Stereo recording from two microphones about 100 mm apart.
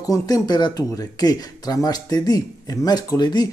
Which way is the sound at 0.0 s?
35° left (ahead or behind).